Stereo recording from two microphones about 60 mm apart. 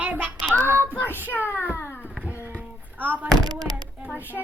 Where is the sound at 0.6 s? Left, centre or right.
Right.